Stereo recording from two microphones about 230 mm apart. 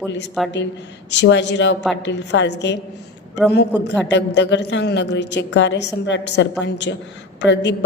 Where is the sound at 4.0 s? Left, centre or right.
Left.